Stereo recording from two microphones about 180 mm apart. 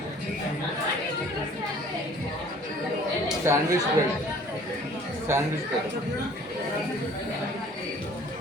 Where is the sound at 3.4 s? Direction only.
15° right (ahead or behind).